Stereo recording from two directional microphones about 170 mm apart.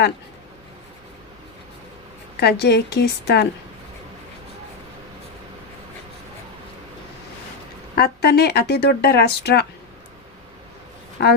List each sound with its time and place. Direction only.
2.4 s speech: 75° left (ahead or behind)
7.9 s speech: 65° left (ahead or behind)
11.2 s speech: 75° left (ahead or behind)